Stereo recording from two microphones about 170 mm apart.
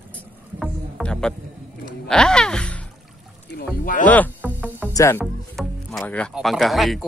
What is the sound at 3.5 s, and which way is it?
Rowboat, 55° left (ahead or behind).